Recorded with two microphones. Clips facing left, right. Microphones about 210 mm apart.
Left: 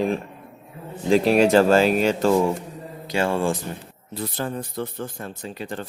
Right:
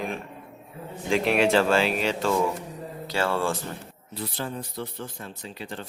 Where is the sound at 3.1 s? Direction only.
15° left (ahead or behind).